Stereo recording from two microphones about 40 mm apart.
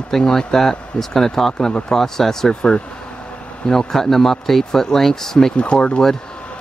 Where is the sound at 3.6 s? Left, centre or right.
Centre.